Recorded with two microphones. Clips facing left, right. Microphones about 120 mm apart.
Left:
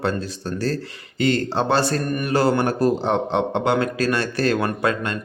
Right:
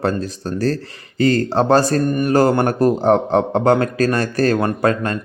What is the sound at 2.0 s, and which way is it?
Mantra, 30° right (ahead or behind).